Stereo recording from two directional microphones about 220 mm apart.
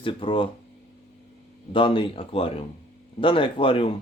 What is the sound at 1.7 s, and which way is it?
Speech, 25° left (ahead or behind).